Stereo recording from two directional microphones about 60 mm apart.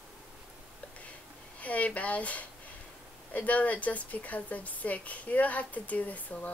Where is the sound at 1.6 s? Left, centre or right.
Left.